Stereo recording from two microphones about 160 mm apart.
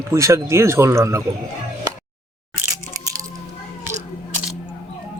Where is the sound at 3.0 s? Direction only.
20° right (ahead or behind).